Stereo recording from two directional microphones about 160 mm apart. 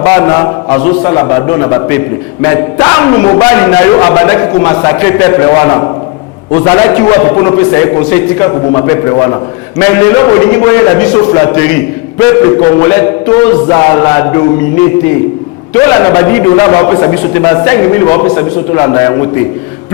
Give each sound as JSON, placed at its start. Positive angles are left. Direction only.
{"t": 0.0, "sound": "a man's voice", "side_deg": 15}